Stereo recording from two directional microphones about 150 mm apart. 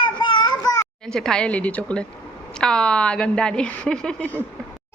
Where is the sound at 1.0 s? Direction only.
5° left (ahead or behind).